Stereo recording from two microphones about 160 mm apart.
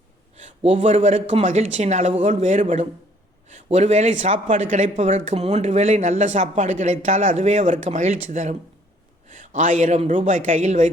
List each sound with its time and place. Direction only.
0.3 s speech: 45° right (ahead or behind)